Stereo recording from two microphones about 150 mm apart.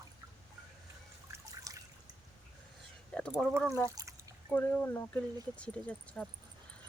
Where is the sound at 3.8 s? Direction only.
20° right (ahead or behind).